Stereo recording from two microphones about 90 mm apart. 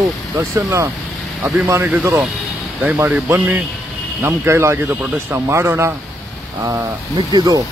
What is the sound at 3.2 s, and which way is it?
Speech, 25° right (ahead or behind).